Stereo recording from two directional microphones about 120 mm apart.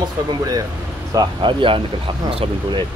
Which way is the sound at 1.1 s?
35° right (ahead or behind).